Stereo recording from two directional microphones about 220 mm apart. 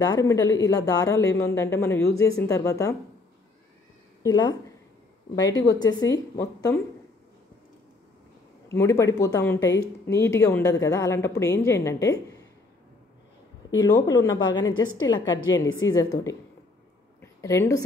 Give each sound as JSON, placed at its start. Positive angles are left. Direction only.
{"t": 0.0, "sound": "speech", "side_deg": 15}
{"t": 4.2, "sound": "speech", "side_deg": 20}
{"t": 8.6, "sound": "speech", "side_deg": 15}
{"t": 13.7, "sound": "speech", "side_deg": 15}
{"t": 17.2, "sound": "a sound", "side_deg": 15}